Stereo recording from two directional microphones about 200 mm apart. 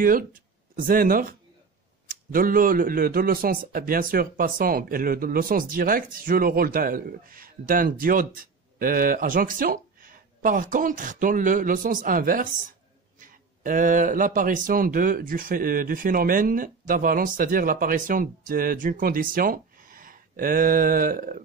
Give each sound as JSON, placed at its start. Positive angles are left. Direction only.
{"t": 0.0, "sound": "speech", "side_deg": -45}
{"t": 2.3, "sound": "speech", "side_deg": -45}